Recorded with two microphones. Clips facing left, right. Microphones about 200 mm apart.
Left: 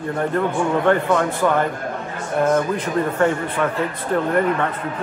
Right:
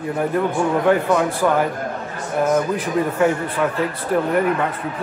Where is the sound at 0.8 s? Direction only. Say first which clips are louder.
Right 1 dB; 5° right (ahead or behind).